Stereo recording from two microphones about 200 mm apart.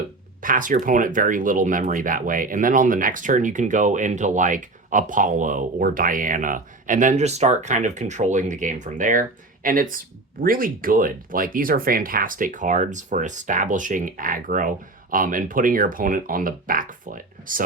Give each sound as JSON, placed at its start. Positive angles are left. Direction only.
{"t": 0.4, "sound": "speech", "side_deg": -40}